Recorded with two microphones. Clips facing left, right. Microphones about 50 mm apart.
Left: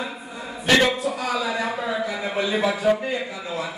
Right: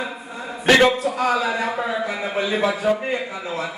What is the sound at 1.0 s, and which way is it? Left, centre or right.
A man's voice, right.